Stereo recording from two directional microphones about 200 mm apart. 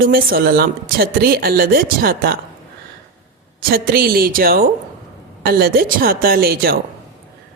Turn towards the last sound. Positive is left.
turn(degrees=-50)  # may be behind; listen again after turning